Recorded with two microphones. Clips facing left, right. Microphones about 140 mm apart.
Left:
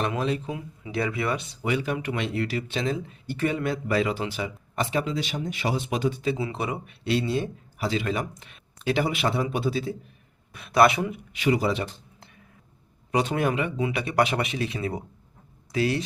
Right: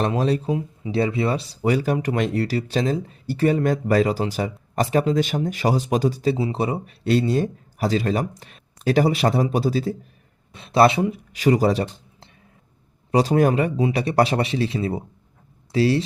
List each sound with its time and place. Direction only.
0.0 s speech: 35° right (ahead or behind)
10.5 s speech: 25° right (ahead or behind)